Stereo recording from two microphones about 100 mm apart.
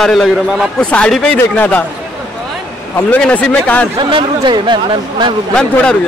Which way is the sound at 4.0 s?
55° right (ahead or behind).